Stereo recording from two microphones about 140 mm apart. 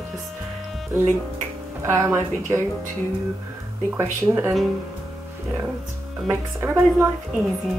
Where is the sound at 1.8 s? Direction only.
20° right (ahead or behind).